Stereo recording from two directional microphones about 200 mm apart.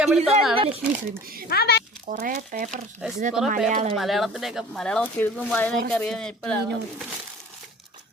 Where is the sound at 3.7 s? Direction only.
40° right (ahead or behind).